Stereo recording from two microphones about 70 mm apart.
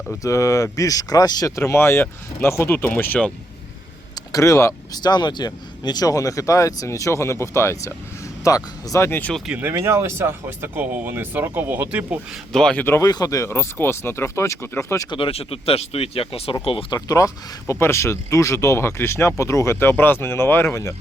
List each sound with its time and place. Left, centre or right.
0.2 s speech: left
1.5 s speech: left
4.1 s vehicle: left
4.9 s speech: left
8.4 s speech: left
9.0 s speech: left
9.5 s speech: right
12.7 s speech: left
13.0 s speech: left
13.5 s speech: left
16.6 s speech: left
17.7 s speech: left
19.7 s speech: left